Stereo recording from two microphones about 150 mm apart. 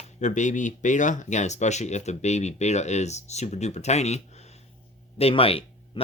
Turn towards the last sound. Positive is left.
turn(degrees=40)  # may be behind; listen again after turning